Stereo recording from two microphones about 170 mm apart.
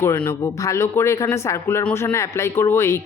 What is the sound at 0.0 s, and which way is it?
Speech, 15° left (ahead or behind).